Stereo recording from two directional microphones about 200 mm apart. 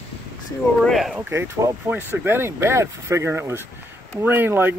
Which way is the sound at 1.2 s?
10° right (ahead or behind).